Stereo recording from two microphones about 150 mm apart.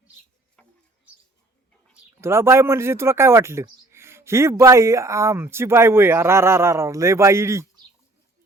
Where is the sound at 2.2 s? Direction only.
15° right (ahead or behind).